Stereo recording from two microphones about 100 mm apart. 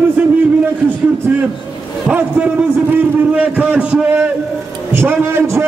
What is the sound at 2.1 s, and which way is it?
A man's voice, 15° right (ahead or behind).